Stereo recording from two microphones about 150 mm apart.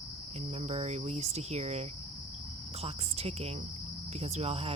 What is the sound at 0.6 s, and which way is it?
Speech, 45° right (ahead or behind).